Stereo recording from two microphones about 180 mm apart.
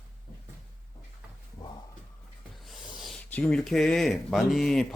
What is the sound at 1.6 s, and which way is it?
Dog, 20° left (ahead or behind).